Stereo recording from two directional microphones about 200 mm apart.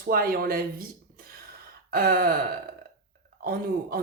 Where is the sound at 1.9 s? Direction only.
50° right (ahead or behind).